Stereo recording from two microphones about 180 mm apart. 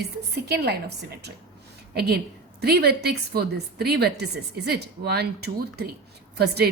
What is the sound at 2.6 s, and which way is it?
A woman's voice, 60° right (ahead or behind).